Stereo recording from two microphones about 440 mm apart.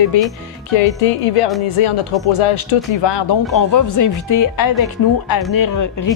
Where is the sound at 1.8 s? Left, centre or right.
Left.